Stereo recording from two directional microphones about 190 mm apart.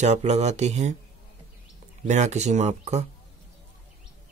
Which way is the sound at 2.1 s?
40° right (ahead or behind).